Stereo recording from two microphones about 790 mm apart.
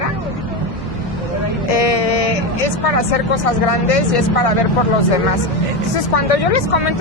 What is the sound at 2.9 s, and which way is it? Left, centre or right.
Speech, left.